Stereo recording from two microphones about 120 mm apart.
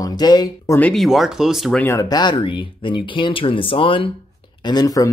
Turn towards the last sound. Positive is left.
turn(degrees=30)  # may be behind; listen again after turning